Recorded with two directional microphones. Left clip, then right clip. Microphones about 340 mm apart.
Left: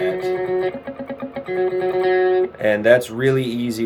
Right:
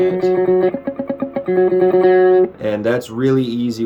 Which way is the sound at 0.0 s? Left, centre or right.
Right.